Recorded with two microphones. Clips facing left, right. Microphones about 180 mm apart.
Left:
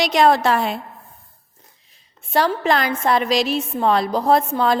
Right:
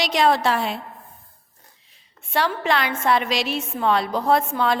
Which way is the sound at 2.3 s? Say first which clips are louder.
Left 4 dB; 40° left (ahead or behind).